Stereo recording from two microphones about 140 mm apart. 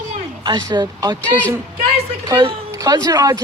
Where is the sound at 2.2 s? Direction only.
30° right (ahead or behind).